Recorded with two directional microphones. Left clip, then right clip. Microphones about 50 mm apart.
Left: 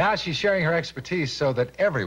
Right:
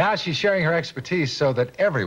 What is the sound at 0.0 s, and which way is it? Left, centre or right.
Speech, left.